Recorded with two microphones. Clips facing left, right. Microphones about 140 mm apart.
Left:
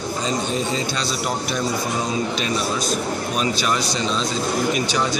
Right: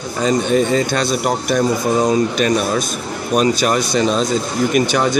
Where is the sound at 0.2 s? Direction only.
60° right (ahead or behind).